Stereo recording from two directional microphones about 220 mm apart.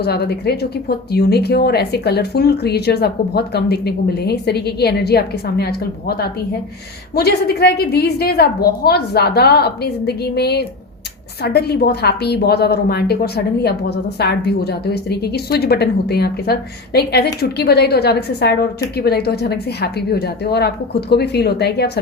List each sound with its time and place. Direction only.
0.0 s speech: 45° left (ahead or behind)